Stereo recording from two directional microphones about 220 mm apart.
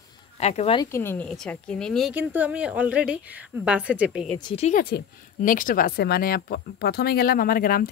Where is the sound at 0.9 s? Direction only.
10° left (ahead or behind).